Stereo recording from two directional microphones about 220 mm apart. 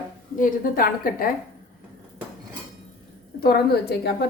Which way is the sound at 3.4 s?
45° left (ahead or behind).